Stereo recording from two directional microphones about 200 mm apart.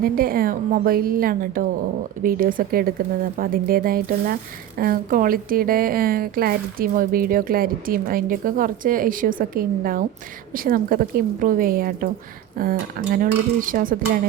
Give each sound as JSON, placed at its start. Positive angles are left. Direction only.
{"t": 0.0, "sound": "a woman's voice", "side_deg": -45}